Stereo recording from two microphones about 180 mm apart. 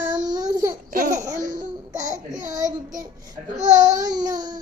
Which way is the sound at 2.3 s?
45° right (ahead or behind).